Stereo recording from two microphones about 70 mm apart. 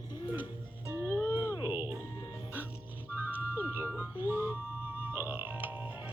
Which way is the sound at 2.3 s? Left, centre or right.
Right.